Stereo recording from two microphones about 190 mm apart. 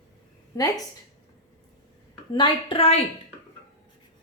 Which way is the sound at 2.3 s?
25° left (ahead or behind).